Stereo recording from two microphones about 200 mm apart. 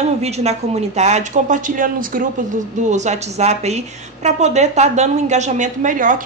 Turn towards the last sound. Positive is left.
turn(degrees=-40)  # may be behind; listen again after turning